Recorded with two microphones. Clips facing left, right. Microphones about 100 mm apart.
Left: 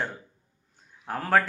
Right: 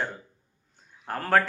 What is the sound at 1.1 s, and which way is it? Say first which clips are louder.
Speech: even; centre (ahead or behind).